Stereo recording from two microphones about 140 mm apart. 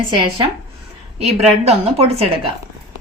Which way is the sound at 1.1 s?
50° right (ahead or behind).